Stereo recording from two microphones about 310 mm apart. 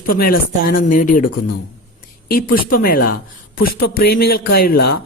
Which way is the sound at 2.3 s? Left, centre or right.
Left.